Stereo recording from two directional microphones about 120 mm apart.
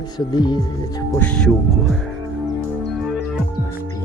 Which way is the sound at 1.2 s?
10° left (ahead or behind).